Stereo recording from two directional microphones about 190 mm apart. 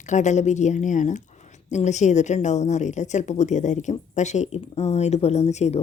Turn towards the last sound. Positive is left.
turn(degrees=35)  # may be behind; listen again after turning